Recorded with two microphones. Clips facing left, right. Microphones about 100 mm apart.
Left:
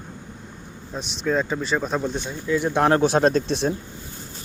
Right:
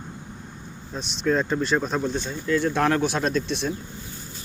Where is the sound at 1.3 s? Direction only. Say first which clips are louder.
Right 1 dB; 5° left (ahead or behind).